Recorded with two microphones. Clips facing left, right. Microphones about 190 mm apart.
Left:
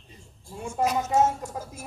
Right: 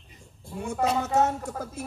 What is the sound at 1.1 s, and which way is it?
Music, 65° right (ahead or behind).